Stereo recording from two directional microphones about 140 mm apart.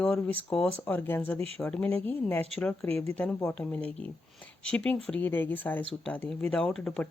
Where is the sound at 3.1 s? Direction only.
10° left (ahead or behind).